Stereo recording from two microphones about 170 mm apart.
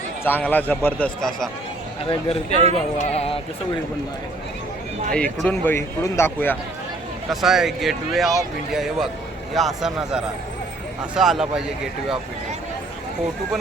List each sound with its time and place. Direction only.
0.3 s speech: 10° left (ahead or behind)
2.6 s speech: 40° right (ahead or behind)
3.0 s speech: 40° left (ahead or behind)
5.1 s speech: 5° left (ahead or behind)
7.3 s speech: centre (ahead or behind)
11.2 s speech: 5° right (ahead or behind)